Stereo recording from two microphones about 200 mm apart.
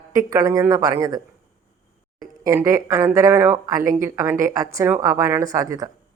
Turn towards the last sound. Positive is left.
turn(degrees=-15)  # may be behind; listen again after turning